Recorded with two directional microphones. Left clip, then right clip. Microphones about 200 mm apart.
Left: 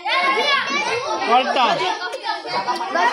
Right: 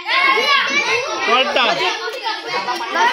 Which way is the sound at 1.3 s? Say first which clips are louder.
Right 1 dB; 60° left (ahead or behind).